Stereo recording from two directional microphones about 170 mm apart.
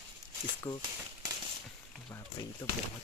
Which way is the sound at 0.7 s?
15° left (ahead or behind).